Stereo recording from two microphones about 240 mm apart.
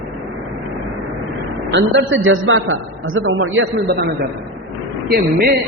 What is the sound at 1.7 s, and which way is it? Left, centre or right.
A man's voice, right.